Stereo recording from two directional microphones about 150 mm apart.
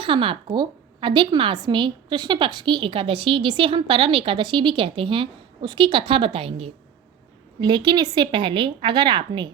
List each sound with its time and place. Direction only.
0.0 s a woman's voice: 35° right (ahead or behind)